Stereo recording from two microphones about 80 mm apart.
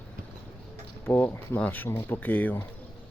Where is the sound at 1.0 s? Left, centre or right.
Left.